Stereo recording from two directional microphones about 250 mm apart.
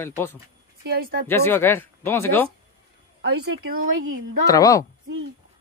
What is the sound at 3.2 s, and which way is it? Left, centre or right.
Speech, right.